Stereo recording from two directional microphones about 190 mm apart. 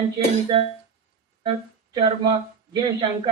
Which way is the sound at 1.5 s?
25° right (ahead or behind).